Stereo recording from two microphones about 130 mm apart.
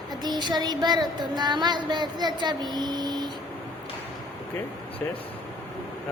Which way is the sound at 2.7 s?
35° right (ahead or behind).